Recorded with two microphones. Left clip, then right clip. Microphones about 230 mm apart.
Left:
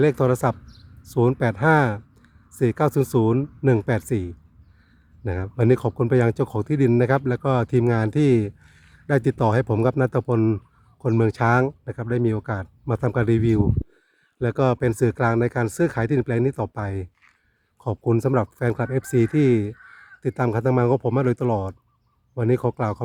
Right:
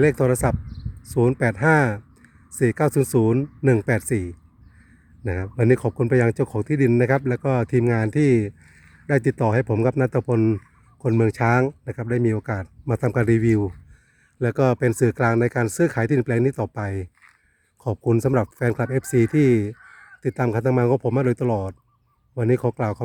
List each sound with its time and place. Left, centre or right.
0.0 s speech: centre
19.7 s crow: left
20.2 s speech: centre